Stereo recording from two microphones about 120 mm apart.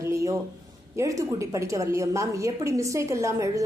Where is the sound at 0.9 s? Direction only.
25° right (ahead or behind).